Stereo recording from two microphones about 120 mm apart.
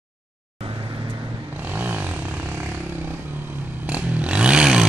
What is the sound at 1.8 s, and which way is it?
Vehicle, 15° right (ahead or behind).